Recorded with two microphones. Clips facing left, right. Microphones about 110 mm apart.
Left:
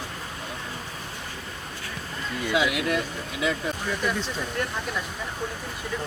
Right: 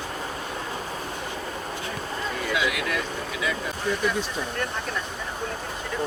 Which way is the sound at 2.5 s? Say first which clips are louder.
Left 4 dB; 25° left (ahead or behind).